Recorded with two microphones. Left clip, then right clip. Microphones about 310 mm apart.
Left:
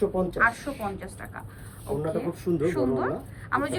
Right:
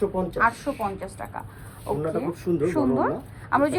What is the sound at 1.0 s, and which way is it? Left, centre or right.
Speech, centre.